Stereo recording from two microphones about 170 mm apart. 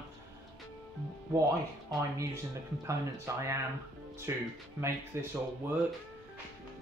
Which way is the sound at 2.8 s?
15° right (ahead or behind).